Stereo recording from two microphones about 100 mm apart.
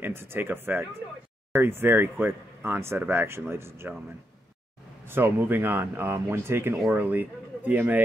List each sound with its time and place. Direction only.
0.0 s speech: 25° right (ahead or behind)
5.0 s speech: 20° right (ahead or behind)